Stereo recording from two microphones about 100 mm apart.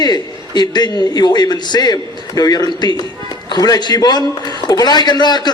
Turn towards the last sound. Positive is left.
turn(degrees=45)  # may be behind; listen again after turning